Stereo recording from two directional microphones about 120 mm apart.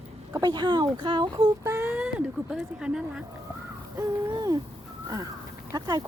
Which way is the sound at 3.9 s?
30° right (ahead or behind).